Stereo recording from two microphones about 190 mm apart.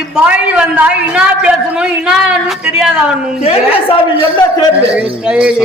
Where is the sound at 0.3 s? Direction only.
5° right (ahead or behind).